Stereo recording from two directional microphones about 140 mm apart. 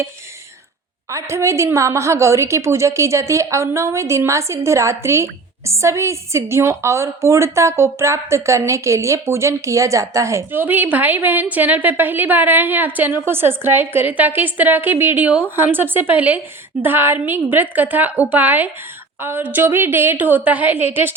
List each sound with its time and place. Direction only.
1.1 s a woman's voice: 20° right (ahead or behind)